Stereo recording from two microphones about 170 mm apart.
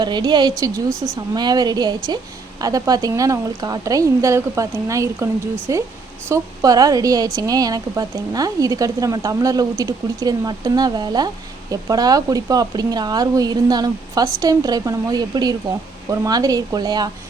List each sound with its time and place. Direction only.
0.0 s a woman's voice: 25° right (ahead or behind)